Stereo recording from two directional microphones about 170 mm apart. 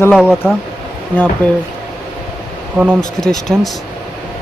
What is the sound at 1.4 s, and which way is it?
Speech, 10° left (ahead or behind).